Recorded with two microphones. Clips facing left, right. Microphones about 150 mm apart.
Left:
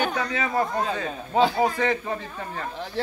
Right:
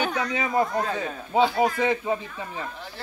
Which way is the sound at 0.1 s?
15° right (ahead or behind).